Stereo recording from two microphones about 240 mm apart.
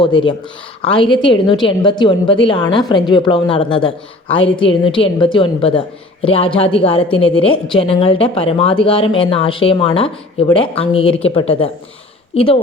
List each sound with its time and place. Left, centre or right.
0.0 s speech: centre